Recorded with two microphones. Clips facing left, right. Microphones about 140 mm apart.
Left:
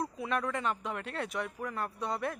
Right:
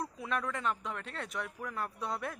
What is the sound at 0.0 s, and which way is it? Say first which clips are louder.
Speech: left 3 dB; centre (ahead or behind).